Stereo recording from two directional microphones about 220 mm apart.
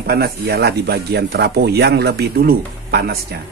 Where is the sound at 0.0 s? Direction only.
45° right (ahead or behind).